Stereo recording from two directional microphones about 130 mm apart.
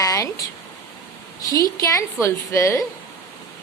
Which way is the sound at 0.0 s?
25° left (ahead or behind).